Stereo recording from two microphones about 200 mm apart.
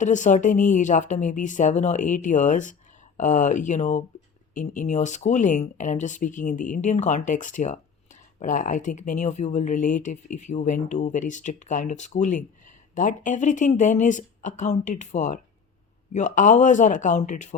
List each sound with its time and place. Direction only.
0.0 s speech: 40° left (ahead or behind)